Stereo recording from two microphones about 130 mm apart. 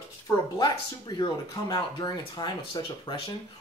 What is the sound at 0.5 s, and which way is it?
Speech, 35° left (ahead or behind).